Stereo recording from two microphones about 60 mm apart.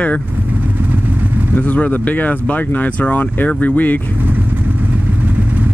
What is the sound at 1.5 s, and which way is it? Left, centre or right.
Speech, left.